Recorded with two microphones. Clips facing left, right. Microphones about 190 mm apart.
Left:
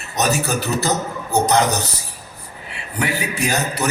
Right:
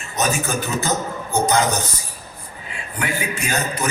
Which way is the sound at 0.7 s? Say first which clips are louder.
Left 2 dB; 40° left (ahead or behind).